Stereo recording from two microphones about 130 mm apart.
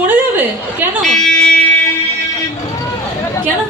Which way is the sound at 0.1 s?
15° right (ahead or behind).